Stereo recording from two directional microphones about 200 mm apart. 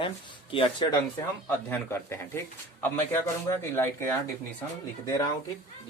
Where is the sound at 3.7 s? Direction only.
10° left (ahead or behind).